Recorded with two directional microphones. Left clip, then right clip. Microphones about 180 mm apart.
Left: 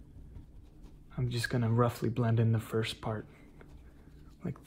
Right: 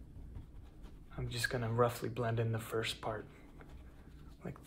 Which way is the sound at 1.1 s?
35° left (ahead or behind).